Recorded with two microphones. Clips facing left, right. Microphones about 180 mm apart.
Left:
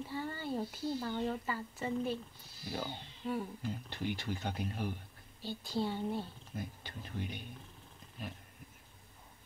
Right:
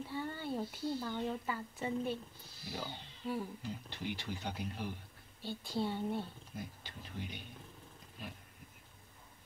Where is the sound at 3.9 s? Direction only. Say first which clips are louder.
Left 4 dB; 50° left (ahead or behind).